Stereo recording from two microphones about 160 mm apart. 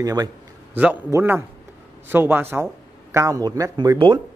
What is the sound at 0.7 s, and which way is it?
Speech, 10° right (ahead or behind).